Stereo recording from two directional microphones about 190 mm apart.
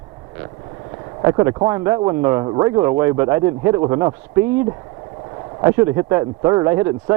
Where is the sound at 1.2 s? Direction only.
20° right (ahead or behind).